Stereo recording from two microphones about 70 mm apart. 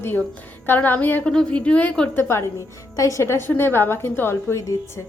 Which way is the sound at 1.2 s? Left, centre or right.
Centre.